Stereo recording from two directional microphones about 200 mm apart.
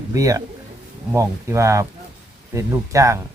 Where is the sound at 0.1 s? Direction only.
15° right (ahead or behind).